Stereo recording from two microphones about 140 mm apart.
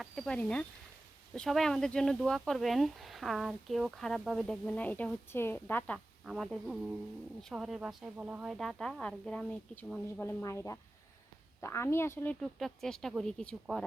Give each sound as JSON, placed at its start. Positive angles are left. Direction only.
{"t": 0.0, "sound": "speech", "side_deg": 5}
{"t": 6.2, "sound": "speech", "side_deg": 0}
{"t": 8.5, "sound": "speech", "side_deg": 0}
{"t": 12.4, "sound": "speech", "side_deg": 0}